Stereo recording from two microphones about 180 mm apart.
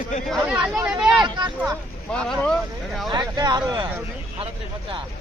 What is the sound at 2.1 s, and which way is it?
Speech, 5° left (ahead or behind).